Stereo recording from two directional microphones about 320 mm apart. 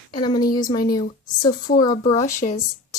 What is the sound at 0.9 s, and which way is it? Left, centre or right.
Speech, left.